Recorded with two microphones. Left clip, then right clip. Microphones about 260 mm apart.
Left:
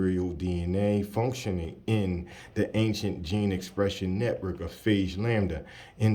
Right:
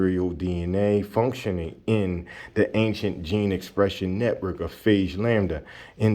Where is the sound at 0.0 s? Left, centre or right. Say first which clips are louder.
Right 5 dB; centre.